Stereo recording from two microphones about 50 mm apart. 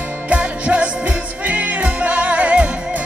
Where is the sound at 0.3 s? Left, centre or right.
Right.